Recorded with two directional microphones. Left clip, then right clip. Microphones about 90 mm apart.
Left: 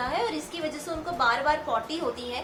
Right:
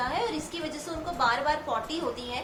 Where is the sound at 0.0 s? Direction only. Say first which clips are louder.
Left 1 dB; 35° left (ahead or behind).